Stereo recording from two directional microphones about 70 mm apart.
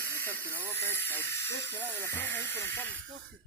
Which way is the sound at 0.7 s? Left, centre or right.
Left.